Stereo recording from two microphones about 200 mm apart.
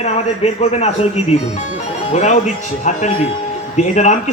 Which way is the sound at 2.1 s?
35° left (ahead or behind).